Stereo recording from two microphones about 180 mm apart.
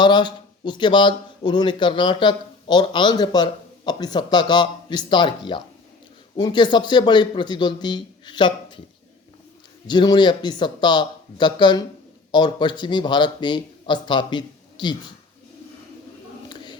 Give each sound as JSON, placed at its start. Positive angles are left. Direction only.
{"t": 0.0, "sound": "speech", "side_deg": 25}
{"t": 9.8, "sound": "speech", "side_deg": 25}